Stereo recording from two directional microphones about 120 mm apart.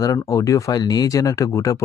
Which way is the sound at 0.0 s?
30° left (ahead or behind).